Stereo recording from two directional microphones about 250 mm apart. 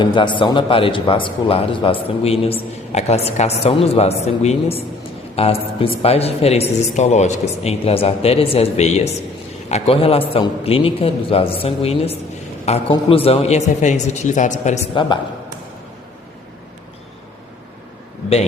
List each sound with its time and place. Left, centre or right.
0.0 s speech: centre